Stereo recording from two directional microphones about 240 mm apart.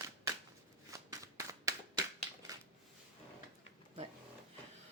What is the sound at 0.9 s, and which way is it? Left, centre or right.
Shuffling cards, centre.